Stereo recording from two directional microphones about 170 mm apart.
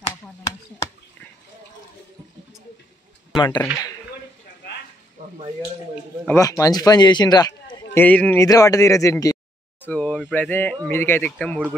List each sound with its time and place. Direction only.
3.3 s speech: 25° left (ahead or behind)
6.2 s speech: 15° left (ahead or behind)
7.7 s a sound: 15° left (ahead or behind)
8.4 s speech: 20° left (ahead or behind)
9.8 s speech: 5° left (ahead or behind)